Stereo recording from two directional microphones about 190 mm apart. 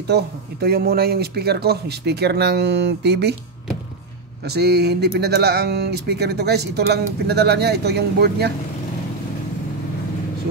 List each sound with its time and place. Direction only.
0.0 s speech: 55° right (ahead or behind)
4.5 s speech: 60° right (ahead or behind)